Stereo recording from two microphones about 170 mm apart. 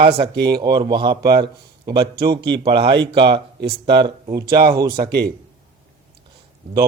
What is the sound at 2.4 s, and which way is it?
Speech, 90° right.